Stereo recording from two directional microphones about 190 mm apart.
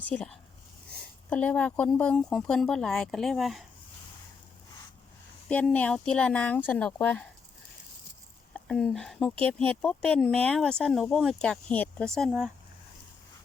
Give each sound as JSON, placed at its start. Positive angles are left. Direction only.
{"t": 0.1, "sound": "speech", "side_deg": 5}
{"t": 5.5, "sound": "speech", "side_deg": 5}
{"t": 8.5, "sound": "speech", "side_deg": 5}